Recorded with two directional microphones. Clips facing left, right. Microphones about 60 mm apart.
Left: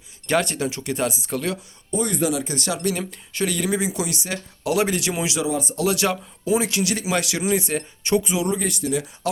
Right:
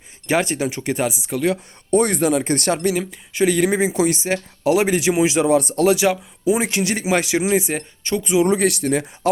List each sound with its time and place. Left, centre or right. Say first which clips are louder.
0.3 s speech: right 2 dB; centre
1.0 s speech: right 3 dB; centre
1.9 s speech: right 6 dB; right
2.9 s speech: right 5 dB; centre
3.4 s speech: right 6 dB; right
5.4 s speech: right 8 dB; right
6.0 s speech: right 4 dB; centre
6.6 s speech: right 2 dB; right
8.4 s speech: right 7 dB; right
8.8 s speech: right 4 dB; right
9.2 s speech: right 7 dB; right